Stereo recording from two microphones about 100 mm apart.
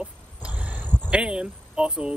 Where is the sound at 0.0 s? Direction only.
10° right (ahead or behind).